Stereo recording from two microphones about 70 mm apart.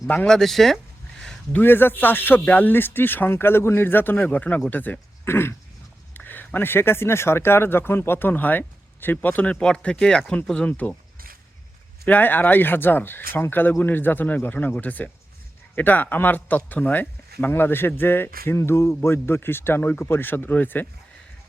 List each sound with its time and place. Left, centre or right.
0.3 s speech: centre
1.5 s speech: left; by 10.4 s centre
10.7 s speech: left
12.0 s speech: left